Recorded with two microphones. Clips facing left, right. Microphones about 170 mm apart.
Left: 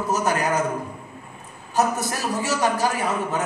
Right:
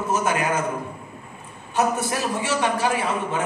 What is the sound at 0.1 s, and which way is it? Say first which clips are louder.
Speech: even; 40° left (ahead or behind).